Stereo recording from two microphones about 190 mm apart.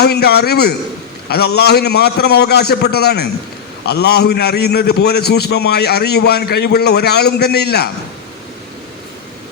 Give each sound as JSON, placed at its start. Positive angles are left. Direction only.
{"t": 0.0, "sound": "a man's voice", "side_deg": 55}